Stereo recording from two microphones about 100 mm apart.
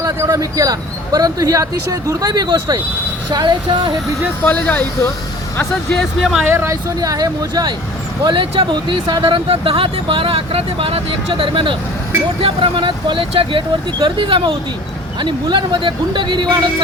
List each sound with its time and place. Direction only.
0.0 s speech: 35° right (ahead or behind)
4.4 s speech: 15° left (ahead or behind)
6.0 s speech: centre (ahead or behind)
6.4 s speech: 25° right (ahead or behind)
7.0 s speech: 40° right (ahead or behind)
8.2 s speech: 55° right (ahead or behind)